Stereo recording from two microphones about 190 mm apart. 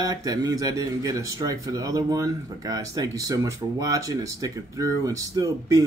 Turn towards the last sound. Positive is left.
turn(degrees=-20)  # may be behind; listen again after turning